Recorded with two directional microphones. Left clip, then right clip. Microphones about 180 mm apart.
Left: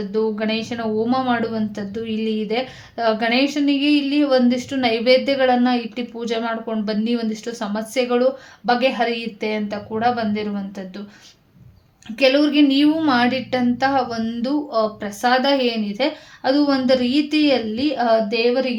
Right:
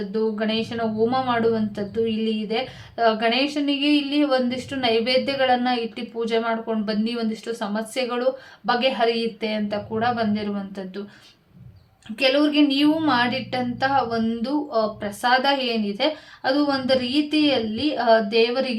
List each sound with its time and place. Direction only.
0.1 s a woman's voice: 30° left (ahead or behind)
12.1 s a woman's voice: 35° left (ahead or behind)